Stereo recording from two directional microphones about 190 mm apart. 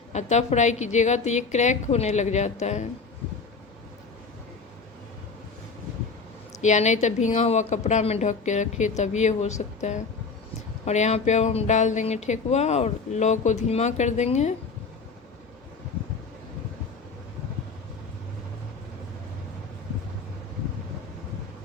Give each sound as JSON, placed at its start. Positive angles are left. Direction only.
{"t": 0.1, "sound": "speech", "side_deg": 35}
{"t": 6.6, "sound": "speech", "side_deg": 40}